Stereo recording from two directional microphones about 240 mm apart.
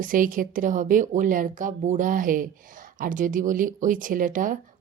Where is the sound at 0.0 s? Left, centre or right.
Right.